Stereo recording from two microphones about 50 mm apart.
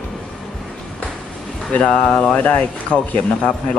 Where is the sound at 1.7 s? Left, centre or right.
Left.